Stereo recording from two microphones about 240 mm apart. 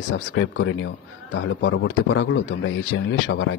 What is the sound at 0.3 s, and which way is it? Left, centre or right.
A man's voice, left.